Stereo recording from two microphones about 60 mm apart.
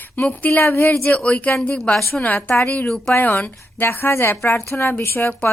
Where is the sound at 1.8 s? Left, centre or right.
Centre.